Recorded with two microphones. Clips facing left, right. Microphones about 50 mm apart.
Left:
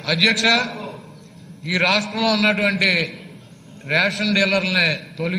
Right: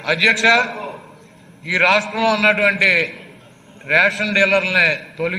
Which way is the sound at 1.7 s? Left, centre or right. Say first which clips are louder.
Right 4 dB; right.